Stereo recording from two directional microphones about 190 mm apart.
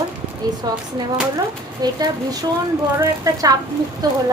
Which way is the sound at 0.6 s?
20° right (ahead or behind).